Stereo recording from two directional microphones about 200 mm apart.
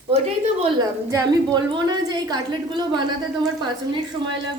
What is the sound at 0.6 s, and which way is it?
A woman's voice, 20° right (ahead or behind).